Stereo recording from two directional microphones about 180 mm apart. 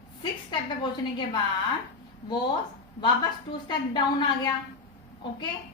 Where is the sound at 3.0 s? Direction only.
25° left (ahead or behind).